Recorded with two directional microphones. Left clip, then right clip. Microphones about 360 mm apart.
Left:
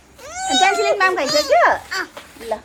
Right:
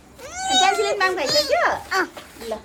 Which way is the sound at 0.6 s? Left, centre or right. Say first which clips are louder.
Left 6 dB; centre.